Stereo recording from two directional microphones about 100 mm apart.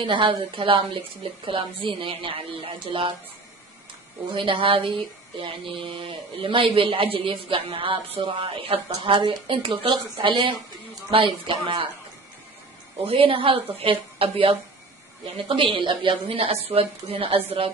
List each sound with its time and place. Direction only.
0.0 s a man's voice: 60° right (ahead or behind)
4.3 s a man's voice: 60° right (ahead or behind)
13.0 s a woman's voice: 65° right (ahead or behind)
15.4 s a man's voice: 60° right (ahead or behind)